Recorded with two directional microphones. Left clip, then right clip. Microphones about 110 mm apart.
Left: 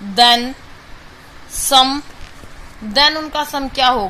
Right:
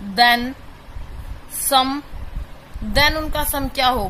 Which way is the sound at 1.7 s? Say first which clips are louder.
Left 5 dB; 5° left (ahead or behind).